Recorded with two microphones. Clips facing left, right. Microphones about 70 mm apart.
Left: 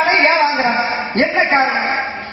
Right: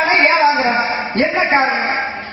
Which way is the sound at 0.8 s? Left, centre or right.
Centre.